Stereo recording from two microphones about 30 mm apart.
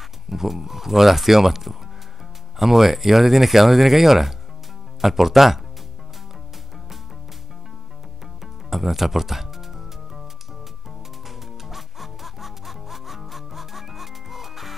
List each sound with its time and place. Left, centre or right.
0.3 s speech: centre
8.6 s music: centre
11.2 s music: centre